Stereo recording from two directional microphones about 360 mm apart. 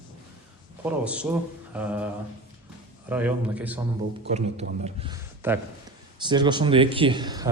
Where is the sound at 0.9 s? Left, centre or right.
Centre.